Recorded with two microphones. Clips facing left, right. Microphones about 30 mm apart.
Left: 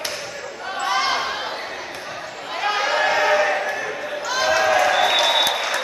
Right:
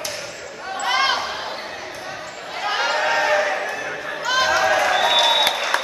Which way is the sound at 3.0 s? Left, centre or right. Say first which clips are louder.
Left 2 dB; centre.